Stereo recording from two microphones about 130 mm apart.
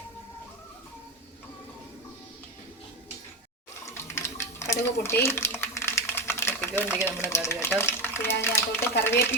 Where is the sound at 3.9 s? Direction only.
20° left (ahead or behind).